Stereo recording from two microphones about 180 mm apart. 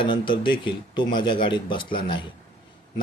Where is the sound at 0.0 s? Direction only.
25° left (ahead or behind).